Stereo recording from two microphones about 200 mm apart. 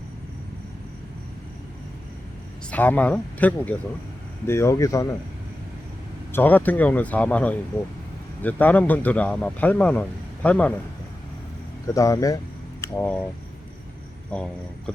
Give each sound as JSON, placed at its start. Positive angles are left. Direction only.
{"t": 2.6, "sound": "a man's voice", "side_deg": 10}
{"t": 6.3, "sound": "a man's voice", "side_deg": 10}
{"t": 11.9, "sound": "a man's voice", "side_deg": 15}
{"t": 14.3, "sound": "speech", "side_deg": 5}